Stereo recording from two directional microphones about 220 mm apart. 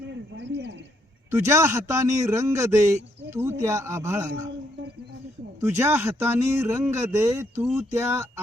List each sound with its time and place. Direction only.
0.1 s a sound: 50° right (ahead or behind)
1.3 s speech: 15° right (ahead or behind)
5.5 s speech: 10° right (ahead or behind)